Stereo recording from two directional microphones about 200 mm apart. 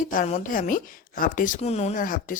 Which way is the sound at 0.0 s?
40° left (ahead or behind).